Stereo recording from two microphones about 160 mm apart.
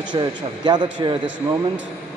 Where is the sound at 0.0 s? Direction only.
30° right (ahead or behind).